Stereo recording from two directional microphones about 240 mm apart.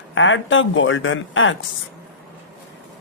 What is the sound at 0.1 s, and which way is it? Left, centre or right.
Speech, left.